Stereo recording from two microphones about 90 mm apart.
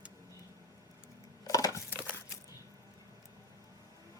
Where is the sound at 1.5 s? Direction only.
40° left (ahead or behind).